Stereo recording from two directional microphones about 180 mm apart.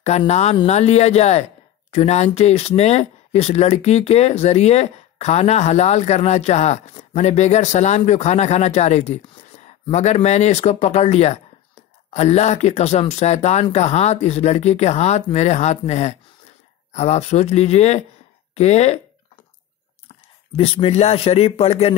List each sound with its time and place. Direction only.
0.3 s speech: 40° left (ahead or behind)
20.1 s speech: 30° left (ahead or behind)